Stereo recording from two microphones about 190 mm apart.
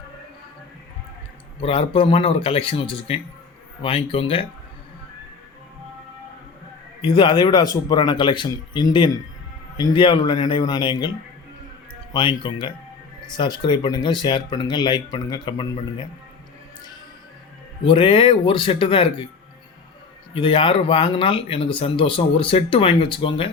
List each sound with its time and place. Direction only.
1.6 s speech: 30° left (ahead or behind)
7.0 s speech: 25° left (ahead or behind)
12.1 s speech: 25° left (ahead or behind)
17.8 s speech: 30° left (ahead or behind)
20.3 s speech: 30° left (ahead or behind)